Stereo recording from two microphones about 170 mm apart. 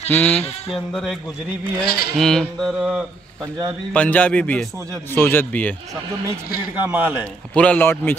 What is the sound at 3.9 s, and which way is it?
A man's voice, 10° left (ahead or behind).